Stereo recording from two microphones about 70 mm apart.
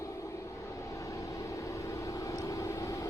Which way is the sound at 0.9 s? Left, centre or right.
Left.